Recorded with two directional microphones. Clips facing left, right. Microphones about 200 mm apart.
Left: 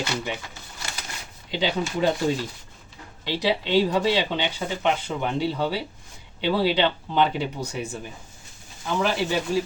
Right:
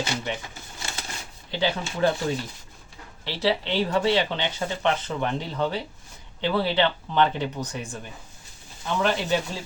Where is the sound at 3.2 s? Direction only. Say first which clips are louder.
Left 1 dB; 15° left (ahead or behind).